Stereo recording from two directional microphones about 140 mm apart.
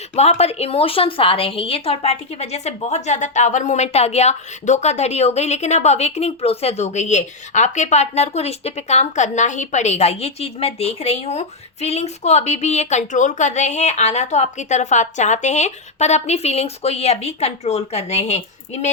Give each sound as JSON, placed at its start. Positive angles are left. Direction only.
{"t": 0.2, "sound": "a woman's voice", "side_deg": 50}